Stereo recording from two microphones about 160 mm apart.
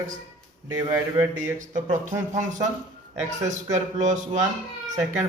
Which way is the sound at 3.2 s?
45° right (ahead or behind).